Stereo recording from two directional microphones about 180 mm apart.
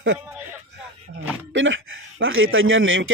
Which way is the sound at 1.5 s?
90° right.